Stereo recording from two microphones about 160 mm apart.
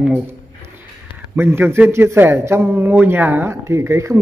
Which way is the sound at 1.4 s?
15° right (ahead or behind).